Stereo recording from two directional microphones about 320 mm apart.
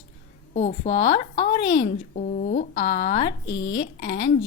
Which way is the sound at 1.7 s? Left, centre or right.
Left.